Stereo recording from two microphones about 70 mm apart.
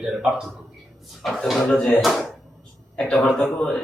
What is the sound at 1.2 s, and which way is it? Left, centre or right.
Speech, centre.